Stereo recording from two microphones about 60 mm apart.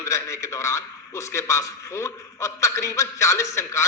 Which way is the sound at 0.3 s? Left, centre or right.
Left.